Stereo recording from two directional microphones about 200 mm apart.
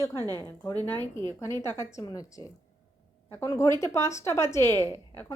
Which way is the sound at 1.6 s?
15° left (ahead or behind).